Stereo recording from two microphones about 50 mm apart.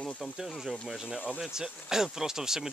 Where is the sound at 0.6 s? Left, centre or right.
Centre.